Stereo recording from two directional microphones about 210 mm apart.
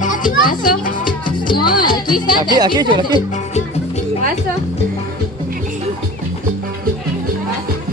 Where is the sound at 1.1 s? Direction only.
20° left (ahead or behind).